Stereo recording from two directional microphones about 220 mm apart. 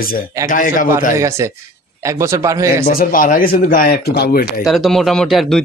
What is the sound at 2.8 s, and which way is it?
A man's voice, 40° left (ahead or behind).